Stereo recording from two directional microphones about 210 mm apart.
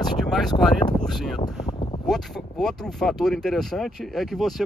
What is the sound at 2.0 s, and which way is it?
Speech, centre (ahead or behind).